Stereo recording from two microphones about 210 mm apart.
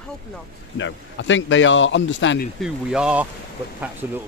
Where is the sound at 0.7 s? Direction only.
65° left (ahead or behind).